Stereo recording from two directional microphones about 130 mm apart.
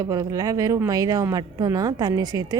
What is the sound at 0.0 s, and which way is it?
A woman's voice, 25° right (ahead or behind).